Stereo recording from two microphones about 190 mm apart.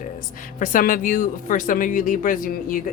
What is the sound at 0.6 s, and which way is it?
Speech, 45° left (ahead or behind).